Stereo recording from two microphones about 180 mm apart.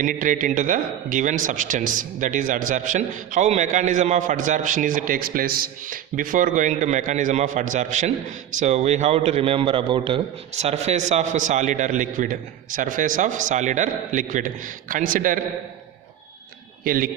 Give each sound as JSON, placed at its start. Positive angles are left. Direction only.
{"t": 0.0, "sound": "speech", "side_deg": -45}
{"t": 16.8, "sound": "speech", "side_deg": -55}